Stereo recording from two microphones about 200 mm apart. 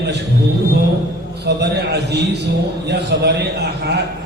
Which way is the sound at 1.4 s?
55° right (ahead or behind).